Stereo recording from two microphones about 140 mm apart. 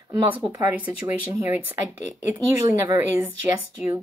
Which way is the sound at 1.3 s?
15° right (ahead or behind).